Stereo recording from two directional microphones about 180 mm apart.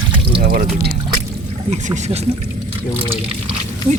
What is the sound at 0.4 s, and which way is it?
Speech, 55° right (ahead or behind).